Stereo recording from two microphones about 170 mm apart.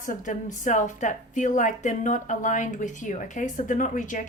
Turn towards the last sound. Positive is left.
turn(degrees=50)  # may be behind; listen again after turning